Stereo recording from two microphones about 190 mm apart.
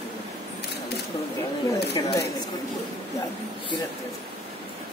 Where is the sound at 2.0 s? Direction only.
25° left (ahead or behind).